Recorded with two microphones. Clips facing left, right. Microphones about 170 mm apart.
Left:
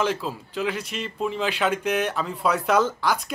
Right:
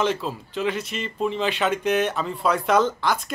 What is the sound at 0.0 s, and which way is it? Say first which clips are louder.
Speech: right 1 dB; 5° left (ahead or behind).